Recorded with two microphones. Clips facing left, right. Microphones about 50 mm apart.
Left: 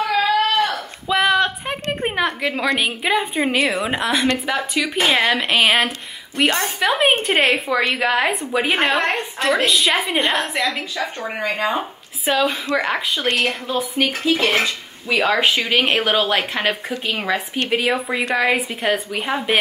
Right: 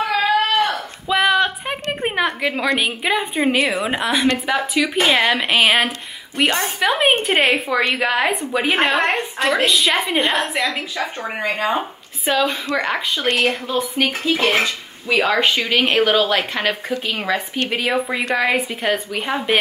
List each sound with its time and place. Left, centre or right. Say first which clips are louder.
0.0 s a sound: even; right
1.0 s a woman's voice: even; centre
11.0 s speech: even; centre
12.3 s speech: even; centre